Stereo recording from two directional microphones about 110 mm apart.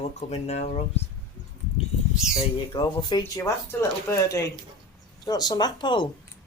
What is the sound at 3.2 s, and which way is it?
Speech, 25° left (ahead or behind).